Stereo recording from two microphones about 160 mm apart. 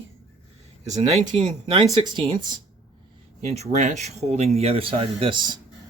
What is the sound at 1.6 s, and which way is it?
Speech, 35° right (ahead or behind).